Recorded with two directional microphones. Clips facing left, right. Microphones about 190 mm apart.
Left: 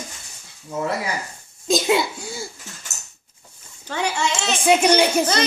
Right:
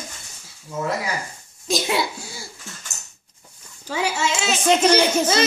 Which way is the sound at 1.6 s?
25° left (ahead or behind).